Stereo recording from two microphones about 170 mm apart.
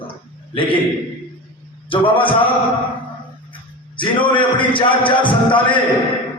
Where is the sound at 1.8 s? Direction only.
30° left (ahead or behind).